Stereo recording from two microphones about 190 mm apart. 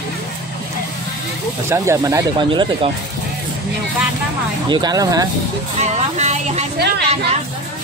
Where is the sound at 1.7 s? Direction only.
15° right (ahead or behind).